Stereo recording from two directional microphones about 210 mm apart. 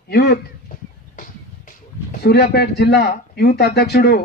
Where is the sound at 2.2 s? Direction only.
50° left (ahead or behind).